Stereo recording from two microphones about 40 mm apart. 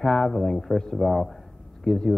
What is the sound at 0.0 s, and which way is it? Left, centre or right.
A man's voice, centre.